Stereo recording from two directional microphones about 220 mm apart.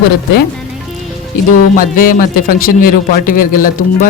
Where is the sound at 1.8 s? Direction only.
40° left (ahead or behind).